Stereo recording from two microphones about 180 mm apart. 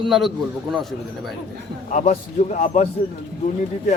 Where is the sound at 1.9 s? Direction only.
45° left (ahead or behind).